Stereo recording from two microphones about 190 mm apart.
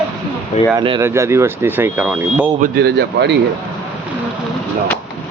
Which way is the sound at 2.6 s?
60° right (ahead or behind).